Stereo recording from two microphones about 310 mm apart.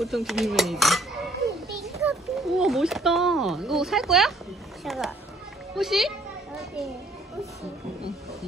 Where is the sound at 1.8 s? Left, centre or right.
Centre.